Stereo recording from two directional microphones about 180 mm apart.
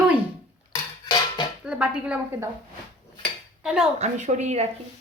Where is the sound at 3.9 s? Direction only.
40° right (ahead or behind).